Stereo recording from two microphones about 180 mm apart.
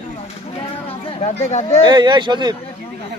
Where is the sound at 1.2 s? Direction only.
40° left (ahead or behind).